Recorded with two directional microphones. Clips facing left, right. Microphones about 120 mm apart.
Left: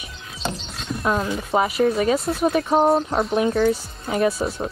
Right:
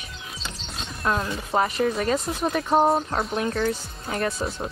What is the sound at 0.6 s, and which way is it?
A woman's voice, centre (ahead or behind).